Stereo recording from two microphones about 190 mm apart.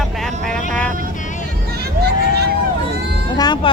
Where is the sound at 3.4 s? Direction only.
20° left (ahead or behind).